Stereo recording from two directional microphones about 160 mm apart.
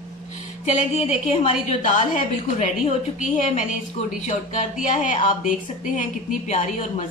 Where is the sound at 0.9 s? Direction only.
40° left (ahead or behind).